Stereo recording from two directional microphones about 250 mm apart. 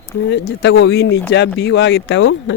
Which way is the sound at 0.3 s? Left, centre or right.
Left.